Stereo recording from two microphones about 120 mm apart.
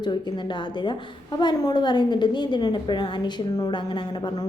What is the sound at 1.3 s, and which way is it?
A woman's voice, 40° left (ahead or behind).